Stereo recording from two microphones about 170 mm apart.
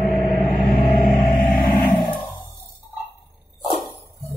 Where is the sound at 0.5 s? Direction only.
20° left (ahead or behind).